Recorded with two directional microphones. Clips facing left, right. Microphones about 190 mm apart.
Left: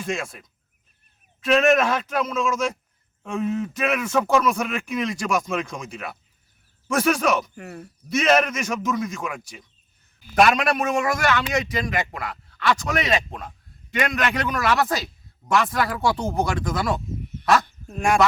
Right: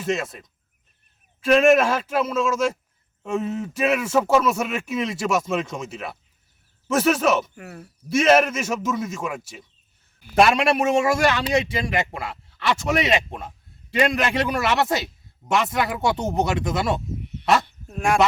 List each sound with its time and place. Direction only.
0.0 s speech: 5° right (ahead or behind)
1.5 s speech: 5° right (ahead or behind)
10.3 s a man's voice: 30° right (ahead or behind)
17.8 s speech: centre (ahead or behind)